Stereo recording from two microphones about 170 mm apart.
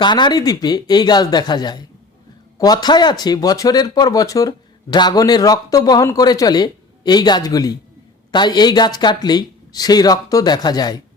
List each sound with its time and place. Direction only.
0.0 s speech: 25° left (ahead or behind)